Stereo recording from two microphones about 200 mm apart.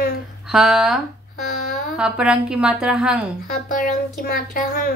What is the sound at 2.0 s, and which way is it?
A woman's voice, 5° right (ahead or behind).